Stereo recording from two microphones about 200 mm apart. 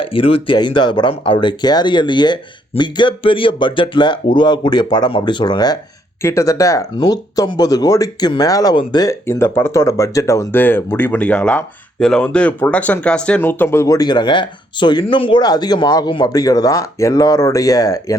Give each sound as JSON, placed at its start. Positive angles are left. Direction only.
{"t": 0.0, "sound": "speech", "side_deg": 25}